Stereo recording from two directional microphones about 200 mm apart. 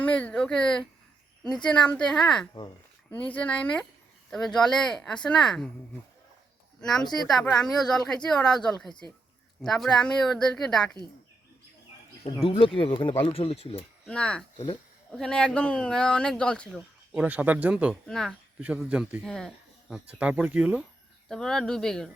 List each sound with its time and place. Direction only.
0.0 s speech: 5° left (ahead or behind)
7.3 s speech: centre (ahead or behind)
8.9 s speech: 20° left (ahead or behind)
9.6 s speech: centre (ahead or behind)
12.2 s speech: 30° left (ahead or behind)
14.0 s speech: 5° left (ahead or behind)
14.5 s speech: 25° left (ahead or behind)
15.1 s speech: 5° left (ahead or behind)